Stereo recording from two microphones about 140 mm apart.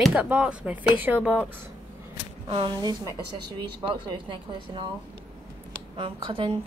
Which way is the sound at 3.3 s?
35° right (ahead or behind).